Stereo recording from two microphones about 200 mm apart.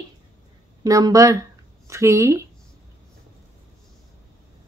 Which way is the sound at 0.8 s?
15° right (ahead or behind).